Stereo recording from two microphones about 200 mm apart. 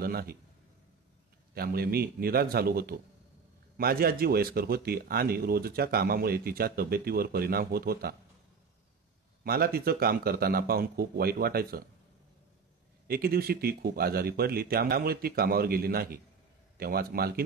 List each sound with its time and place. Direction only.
0.0 s speech: 50° right (ahead or behind)
1.5 s speech: 50° right (ahead or behind)
9.4 s speech: 50° right (ahead or behind)
13.1 s speech: 50° right (ahead or behind)